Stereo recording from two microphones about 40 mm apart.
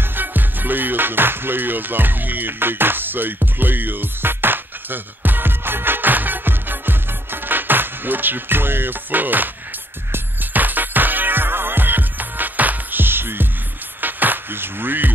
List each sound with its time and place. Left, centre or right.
0.0 s music: right
13.0 s music: right
14.0 s music: right